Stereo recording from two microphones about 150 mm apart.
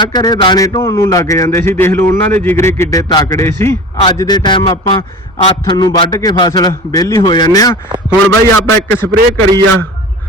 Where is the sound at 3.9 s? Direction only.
35° left (ahead or behind).